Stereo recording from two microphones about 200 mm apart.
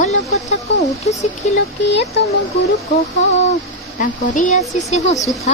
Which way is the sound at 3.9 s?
40° left (ahead or behind).